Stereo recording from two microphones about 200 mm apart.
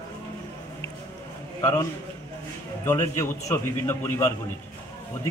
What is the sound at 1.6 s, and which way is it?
A man's voice, 20° left (ahead or behind).